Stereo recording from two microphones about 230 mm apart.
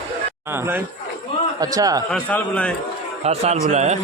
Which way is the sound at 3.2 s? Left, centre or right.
Right.